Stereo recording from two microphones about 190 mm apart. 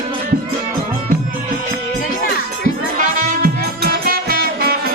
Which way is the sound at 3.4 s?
50° right (ahead or behind).